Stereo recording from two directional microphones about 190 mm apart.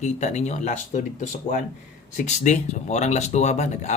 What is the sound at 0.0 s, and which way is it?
Speech, 40° left (ahead or behind).